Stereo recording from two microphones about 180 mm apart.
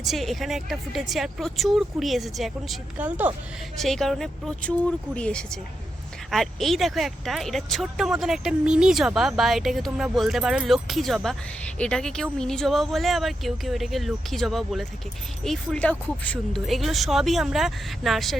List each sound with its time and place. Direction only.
0.0 s speech: centre (ahead or behind)
3.8 s speech: centre (ahead or behind)